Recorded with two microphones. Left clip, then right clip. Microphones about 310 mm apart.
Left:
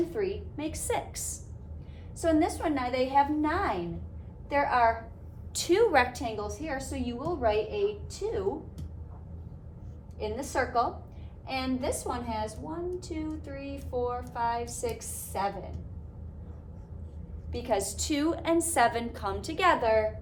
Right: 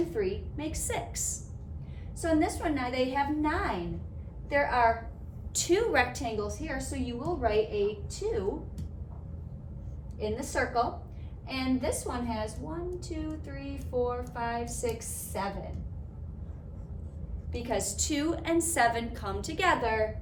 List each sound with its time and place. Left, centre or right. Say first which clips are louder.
0.1 s a woman's voice: even; centre
10.2 s a woman's voice: even; centre
17.5 s a woman's voice: left 3 dB; centre